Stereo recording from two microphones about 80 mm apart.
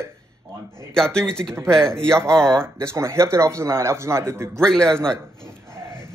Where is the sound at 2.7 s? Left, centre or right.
Right.